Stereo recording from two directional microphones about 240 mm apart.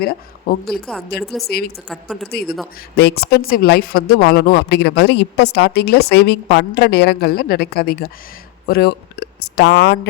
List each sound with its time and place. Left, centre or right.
0.0 s speech: left
0.7 s a woman's voice: centre
1.5 s speech: left
1.9 s a woman's voice: centre
2.3 s speech: left